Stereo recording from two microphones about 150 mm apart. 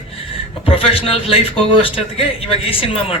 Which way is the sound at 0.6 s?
40° left (ahead or behind).